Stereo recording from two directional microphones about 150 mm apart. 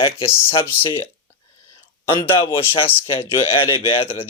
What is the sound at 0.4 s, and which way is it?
Speech, 35° left (ahead or behind).